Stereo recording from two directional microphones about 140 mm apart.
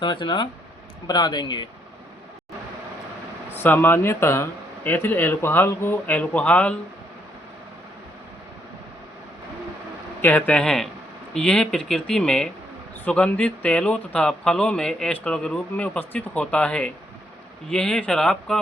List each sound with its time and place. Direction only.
0.0 s speech: 35° left (ahead or behind)
3.5 s speech: 15° left (ahead or behind)
10.2 s speech: 10° left (ahead or behind)